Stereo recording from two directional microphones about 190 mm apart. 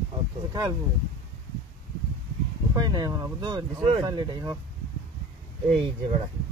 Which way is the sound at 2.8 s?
20° right (ahead or behind).